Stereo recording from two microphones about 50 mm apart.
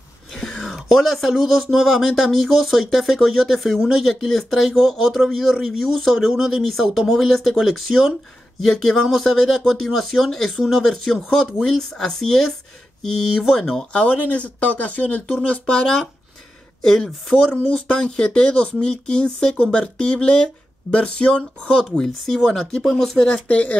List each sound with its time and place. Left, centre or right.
0.3 s speech: centre
13.6 s speech: centre
13.9 s speech: left